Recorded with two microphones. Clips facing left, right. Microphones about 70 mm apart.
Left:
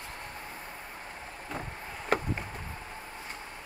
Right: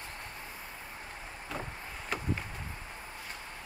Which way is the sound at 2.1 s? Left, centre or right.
Left.